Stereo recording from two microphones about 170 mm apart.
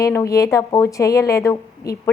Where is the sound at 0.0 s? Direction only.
20° left (ahead or behind).